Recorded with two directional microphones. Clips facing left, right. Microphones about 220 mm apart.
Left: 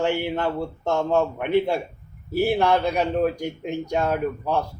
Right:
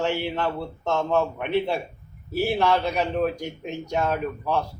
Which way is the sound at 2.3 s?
15° left (ahead or behind).